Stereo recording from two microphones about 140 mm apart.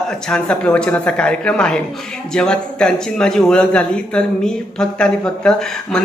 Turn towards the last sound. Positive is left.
turn(degrees=5)  # may be behind; listen again after turning